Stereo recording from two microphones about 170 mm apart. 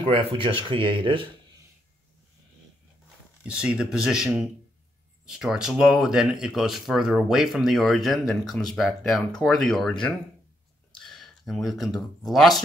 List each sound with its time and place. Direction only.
0.1 s speech: 30° right (ahead or behind)
3.4 s speech: 5° right (ahead or behind)